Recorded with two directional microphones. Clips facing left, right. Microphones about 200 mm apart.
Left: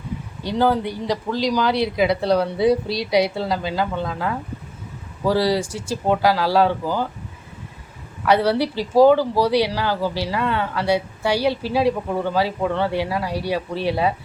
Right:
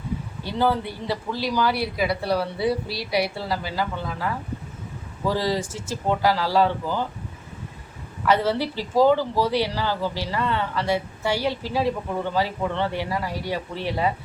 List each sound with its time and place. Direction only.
0.4 s speech: 15° left (ahead or behind)
8.3 s speech: 15° left (ahead or behind)